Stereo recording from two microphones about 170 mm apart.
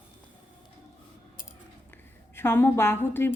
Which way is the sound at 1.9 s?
15° left (ahead or behind).